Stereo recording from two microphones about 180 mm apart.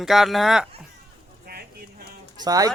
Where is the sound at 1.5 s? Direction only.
55° right (ahead or behind).